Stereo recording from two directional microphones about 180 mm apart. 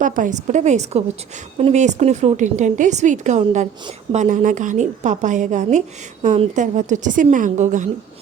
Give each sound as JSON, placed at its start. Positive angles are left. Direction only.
{"t": 0.0, "sound": "a woman's voice", "side_deg": -45}